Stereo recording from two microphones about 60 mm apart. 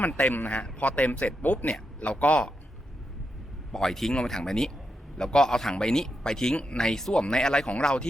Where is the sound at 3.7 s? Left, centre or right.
Centre.